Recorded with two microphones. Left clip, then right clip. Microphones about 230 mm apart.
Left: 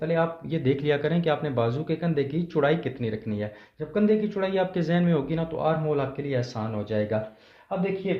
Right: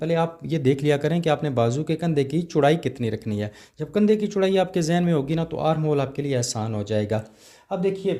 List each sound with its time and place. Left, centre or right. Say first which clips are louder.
0.0 s speech: right 2 dB; right